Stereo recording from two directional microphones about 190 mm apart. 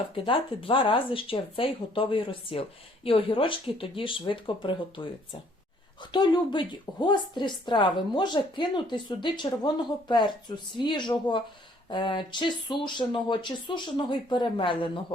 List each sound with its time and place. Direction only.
0.3 s speech: 25° left (ahead or behind)